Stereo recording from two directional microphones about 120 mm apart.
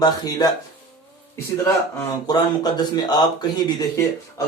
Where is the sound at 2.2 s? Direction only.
35° left (ahead or behind).